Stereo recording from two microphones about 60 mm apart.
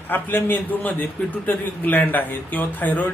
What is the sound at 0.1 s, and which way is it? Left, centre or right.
Speech, left.